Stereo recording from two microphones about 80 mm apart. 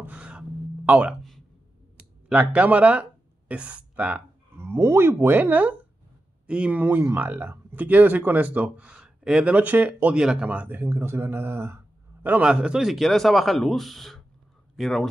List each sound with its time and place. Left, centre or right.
0.0 s a sound: centre
2.2 s speech: centre
4.6 s speech: right
12.4 s speech: centre